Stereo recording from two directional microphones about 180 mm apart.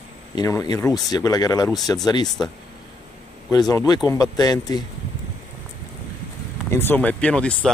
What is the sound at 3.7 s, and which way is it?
Speech, 20° left (ahead or behind).